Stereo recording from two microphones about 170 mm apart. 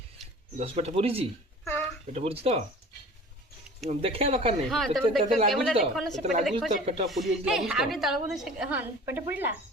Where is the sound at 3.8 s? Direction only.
35° right (ahead or behind).